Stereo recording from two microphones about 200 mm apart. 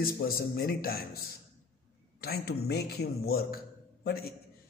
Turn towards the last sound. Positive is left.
turn(degrees=50)  # may be behind; listen again after turning